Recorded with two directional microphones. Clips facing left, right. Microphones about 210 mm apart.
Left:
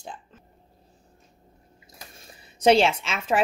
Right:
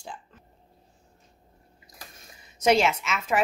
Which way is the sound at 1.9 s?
30° left (ahead or behind).